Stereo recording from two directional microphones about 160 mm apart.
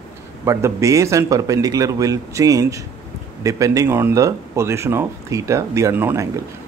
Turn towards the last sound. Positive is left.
turn(degrees=-15)  # may be behind; listen again after turning